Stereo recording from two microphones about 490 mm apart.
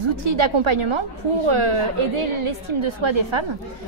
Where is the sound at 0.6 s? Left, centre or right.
Right.